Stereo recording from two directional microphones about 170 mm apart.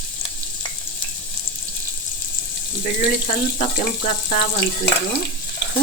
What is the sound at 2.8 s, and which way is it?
Speech, 50° left (ahead or behind).